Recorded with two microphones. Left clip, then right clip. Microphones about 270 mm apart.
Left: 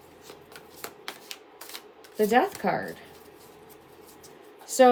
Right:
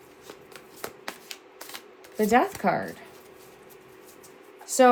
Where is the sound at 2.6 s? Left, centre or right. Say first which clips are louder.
Right 2 dB; right.